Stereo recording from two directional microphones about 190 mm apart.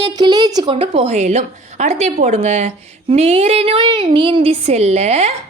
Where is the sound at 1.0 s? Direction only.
35° right (ahead or behind).